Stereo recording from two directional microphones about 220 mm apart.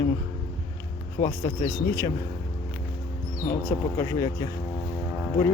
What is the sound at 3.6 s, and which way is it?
Speech, 10° left (ahead or behind).